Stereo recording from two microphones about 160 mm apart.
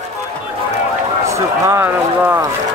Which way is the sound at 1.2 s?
20° right (ahead or behind).